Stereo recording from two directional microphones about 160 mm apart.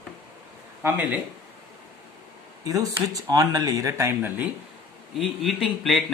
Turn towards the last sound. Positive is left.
turn(degrees=0)  # may be behind; listen again after turning